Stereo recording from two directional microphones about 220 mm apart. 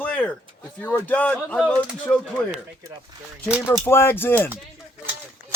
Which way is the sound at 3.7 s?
10° left (ahead or behind).